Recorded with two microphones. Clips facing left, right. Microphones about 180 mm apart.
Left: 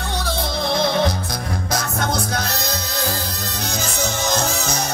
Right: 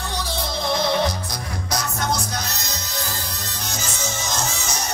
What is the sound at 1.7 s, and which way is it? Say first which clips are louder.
Music: left 1 dB; 55° left (ahead or behind).